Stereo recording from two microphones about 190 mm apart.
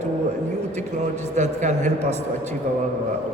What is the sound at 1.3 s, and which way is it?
Speech, 40° right (ahead or behind).